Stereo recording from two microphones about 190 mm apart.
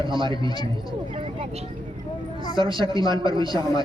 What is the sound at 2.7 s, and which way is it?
Speech, 25° right (ahead or behind).